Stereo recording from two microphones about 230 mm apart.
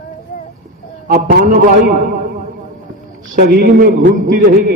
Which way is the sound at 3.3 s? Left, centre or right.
Right.